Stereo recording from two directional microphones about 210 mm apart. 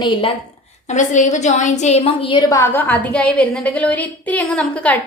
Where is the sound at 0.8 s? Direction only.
35° left (ahead or behind).